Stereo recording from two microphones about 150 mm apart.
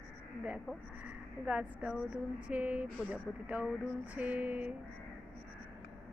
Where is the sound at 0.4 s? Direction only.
10° right (ahead or behind).